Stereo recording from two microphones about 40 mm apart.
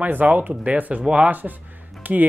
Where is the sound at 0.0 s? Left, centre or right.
Right.